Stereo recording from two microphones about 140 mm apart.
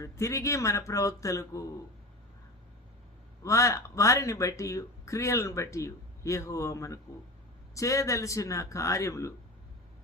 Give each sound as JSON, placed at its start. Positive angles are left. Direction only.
{"t": 0.0, "sound": "speech", "side_deg": 20}
{"t": 3.4, "sound": "speech", "side_deg": 20}